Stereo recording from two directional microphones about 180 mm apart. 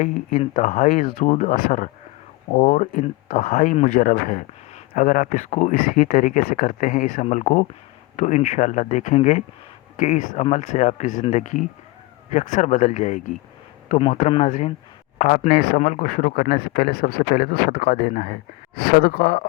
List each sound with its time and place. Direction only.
0.0 s speech: 40° left (ahead or behind)
2.5 s speech: 40° left (ahead or behind)
15.5 s speech: 60° left (ahead or behind)
15.8 s speech: 45° left (ahead or behind); by 19.5 s 60° left (ahead or behind)